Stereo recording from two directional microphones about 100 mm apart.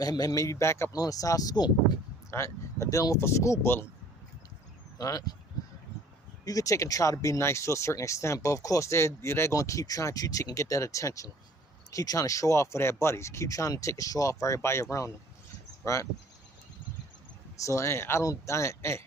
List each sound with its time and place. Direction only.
0.0 s speech: 40° left (ahead or behind)
2.3 s speech: 30° left (ahead or behind)
4.9 s speech: 35° left (ahead or behind)
6.4 s speech: 35° left (ahead or behind)
17.6 s speech: 30° left (ahead or behind)